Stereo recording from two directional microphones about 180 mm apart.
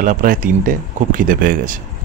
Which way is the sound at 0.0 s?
50° right (ahead or behind).